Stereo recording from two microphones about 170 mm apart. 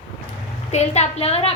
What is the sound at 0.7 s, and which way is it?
Speech, 40° left (ahead or behind).